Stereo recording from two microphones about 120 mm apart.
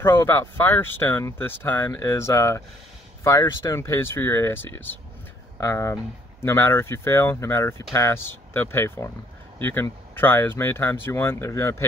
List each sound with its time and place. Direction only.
0.0 s speech: 20° left (ahead or behind)